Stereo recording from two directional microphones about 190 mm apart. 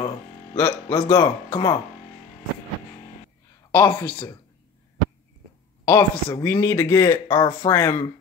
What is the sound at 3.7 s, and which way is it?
Speech, 25° left (ahead or behind).